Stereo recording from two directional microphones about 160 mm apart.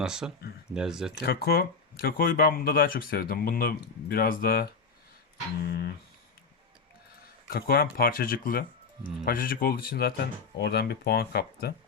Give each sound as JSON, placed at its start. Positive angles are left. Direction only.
{"t": 0.0, "sound": "speech", "side_deg": -5}
{"t": 1.2, "sound": "speech", "side_deg": 75}
{"t": 7.4, "sound": "speech", "side_deg": 70}